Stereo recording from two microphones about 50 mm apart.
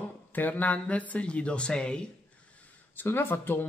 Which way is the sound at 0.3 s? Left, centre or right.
Left.